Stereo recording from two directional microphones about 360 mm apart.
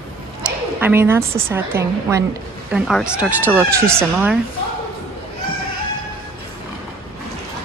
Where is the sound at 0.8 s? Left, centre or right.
Centre.